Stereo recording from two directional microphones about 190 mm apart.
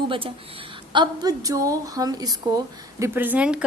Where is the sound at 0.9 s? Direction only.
20° right (ahead or behind).